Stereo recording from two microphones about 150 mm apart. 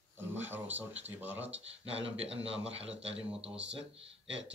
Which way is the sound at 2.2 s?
40° right (ahead or behind).